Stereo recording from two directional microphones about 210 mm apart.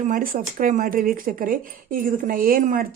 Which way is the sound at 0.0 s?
40° right (ahead or behind).